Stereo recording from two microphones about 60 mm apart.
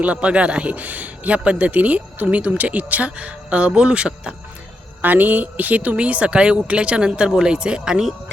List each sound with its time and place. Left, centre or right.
0.0 s a man's voice: right
5.0 s speech: right; by 8.1 s centre